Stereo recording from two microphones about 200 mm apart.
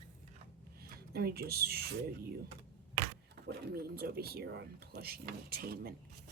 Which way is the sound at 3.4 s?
50° right (ahead or behind).